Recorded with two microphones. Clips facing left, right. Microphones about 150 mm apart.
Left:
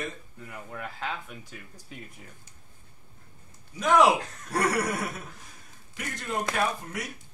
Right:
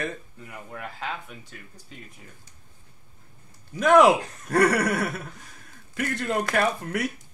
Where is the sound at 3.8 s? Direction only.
55° right (ahead or behind).